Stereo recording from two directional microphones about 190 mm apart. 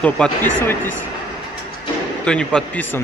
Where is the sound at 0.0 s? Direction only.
5° left (ahead or behind).